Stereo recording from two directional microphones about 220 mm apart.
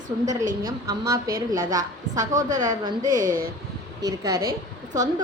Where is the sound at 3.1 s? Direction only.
40° right (ahead or behind).